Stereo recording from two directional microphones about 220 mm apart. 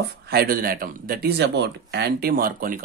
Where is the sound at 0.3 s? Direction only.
45° right (ahead or behind).